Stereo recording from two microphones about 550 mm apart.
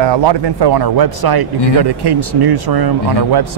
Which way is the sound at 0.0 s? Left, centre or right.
Right.